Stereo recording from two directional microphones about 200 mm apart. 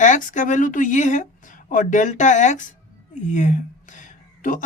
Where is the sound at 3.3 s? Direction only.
35° left (ahead or behind).